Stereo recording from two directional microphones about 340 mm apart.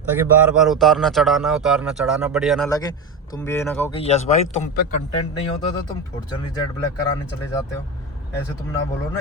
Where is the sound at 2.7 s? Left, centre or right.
Centre.